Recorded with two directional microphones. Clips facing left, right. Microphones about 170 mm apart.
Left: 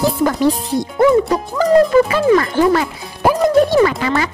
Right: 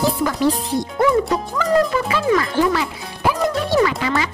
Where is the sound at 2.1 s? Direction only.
45° left (ahead or behind).